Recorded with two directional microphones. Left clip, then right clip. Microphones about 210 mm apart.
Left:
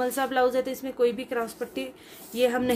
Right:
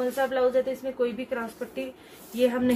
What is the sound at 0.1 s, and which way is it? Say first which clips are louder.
A woman's voice: even; 55° left (ahead or behind).